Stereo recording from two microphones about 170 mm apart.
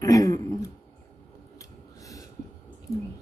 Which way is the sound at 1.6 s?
20° left (ahead or behind).